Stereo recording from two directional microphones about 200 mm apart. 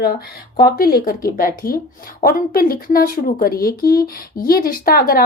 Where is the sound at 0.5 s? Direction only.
50° left (ahead or behind).